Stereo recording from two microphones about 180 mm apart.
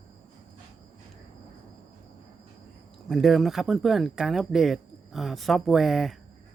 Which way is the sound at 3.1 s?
Centre (ahead or behind).